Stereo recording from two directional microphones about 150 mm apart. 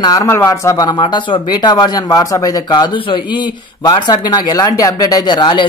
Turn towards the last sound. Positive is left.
turn(degrees=30)  # may be behind; listen again after turning